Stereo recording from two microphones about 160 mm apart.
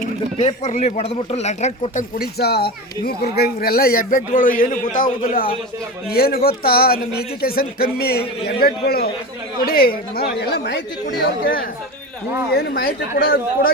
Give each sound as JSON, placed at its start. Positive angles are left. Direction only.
{"t": 0.4, "sound": "speech", "side_deg": 45}
{"t": 2.1, "sound": "speech", "side_deg": 75}
{"t": 6.1, "sound": "speech", "side_deg": 70}
{"t": 11.2, "sound": "speech", "side_deg": 65}